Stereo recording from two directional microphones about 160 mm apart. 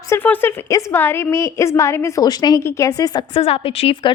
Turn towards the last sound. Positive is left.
turn(degrees=35)  # may be behind; listen again after turning